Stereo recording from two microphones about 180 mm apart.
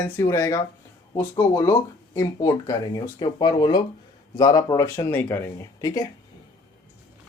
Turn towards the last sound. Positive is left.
turn(degrees=20)  # may be behind; listen again after turning